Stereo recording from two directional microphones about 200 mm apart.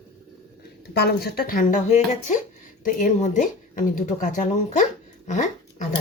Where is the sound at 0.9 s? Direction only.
55° left (ahead or behind); by 5.9 s 35° left (ahead or behind).